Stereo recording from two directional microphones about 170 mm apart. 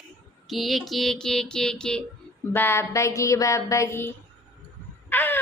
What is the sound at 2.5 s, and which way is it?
Speech, 15° left (ahead or behind).